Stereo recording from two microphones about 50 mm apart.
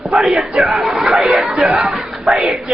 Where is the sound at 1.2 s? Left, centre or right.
Right.